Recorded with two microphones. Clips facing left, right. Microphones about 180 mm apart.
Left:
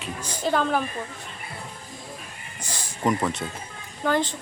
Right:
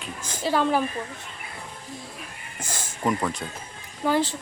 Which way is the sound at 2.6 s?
50° right (ahead or behind).